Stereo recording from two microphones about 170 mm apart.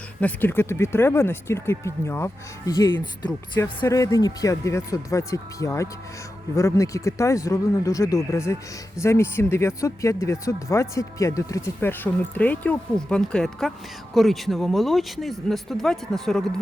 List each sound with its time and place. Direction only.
0.2 s speech: 10° left (ahead or behind)